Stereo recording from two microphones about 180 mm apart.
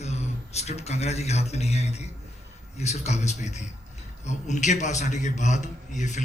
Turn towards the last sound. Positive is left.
turn(degrees=40)  # may be behind; listen again after turning